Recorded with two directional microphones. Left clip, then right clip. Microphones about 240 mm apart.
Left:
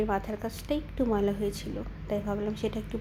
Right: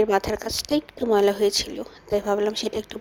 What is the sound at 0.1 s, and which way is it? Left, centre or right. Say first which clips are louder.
A woman's voice: right 9 dB; right.